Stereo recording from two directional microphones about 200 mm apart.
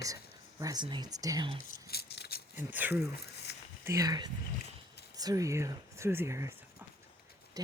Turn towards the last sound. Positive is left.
turn(degrees=-15)  # may be behind; listen again after turning